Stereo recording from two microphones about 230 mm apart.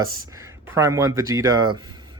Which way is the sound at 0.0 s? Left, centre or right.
Centre.